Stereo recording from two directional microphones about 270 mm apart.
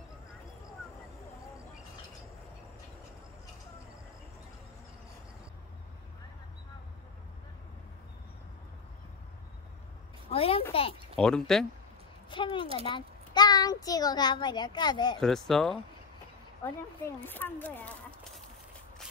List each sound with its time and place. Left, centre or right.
10.3 s a child's voice: left
11.1 s speech: centre
12.3 s a child's voice: centre
15.1 s speech: centre
17.3 s speech: centre